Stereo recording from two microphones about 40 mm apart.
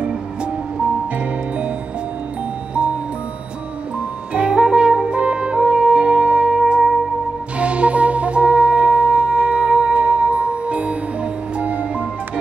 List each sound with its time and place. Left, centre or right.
0.4 s music: right
4.3 s brass instrument: right
5.9 s music: right
7.5 s music: right